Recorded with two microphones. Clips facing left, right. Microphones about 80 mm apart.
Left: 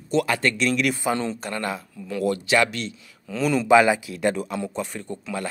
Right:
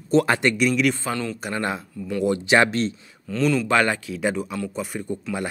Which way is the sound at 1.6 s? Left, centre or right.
Right.